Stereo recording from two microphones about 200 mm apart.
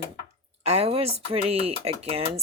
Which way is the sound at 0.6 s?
30° right (ahead or behind).